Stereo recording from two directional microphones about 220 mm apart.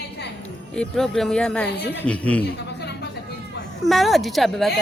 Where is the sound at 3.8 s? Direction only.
Centre (ahead or behind).